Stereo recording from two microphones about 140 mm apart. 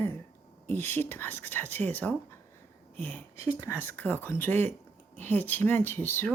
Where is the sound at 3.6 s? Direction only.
20° left (ahead or behind).